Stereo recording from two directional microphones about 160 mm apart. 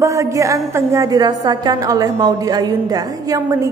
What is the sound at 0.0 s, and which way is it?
A woman's voice, 20° right (ahead or behind).